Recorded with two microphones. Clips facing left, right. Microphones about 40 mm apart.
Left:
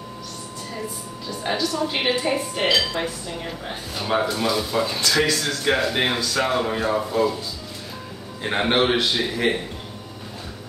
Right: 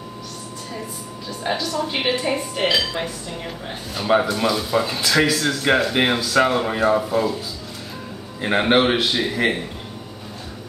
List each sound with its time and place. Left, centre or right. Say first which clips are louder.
1.4 s speech: even; centre
8.4 s speech: right 3 dB; centre